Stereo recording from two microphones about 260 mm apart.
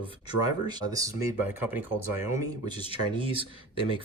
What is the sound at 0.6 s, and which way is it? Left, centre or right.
Speech, centre.